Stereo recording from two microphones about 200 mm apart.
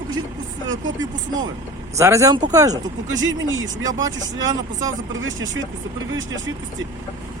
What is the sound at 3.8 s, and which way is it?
Speech, 20° right (ahead or behind).